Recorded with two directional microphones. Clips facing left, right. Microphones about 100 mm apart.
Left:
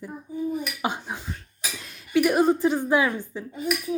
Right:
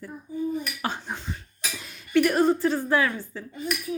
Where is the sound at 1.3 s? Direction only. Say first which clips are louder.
Even; centre (ahead or behind).